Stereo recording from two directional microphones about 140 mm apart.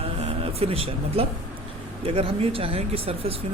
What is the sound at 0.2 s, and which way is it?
Speech, 45° right (ahead or behind).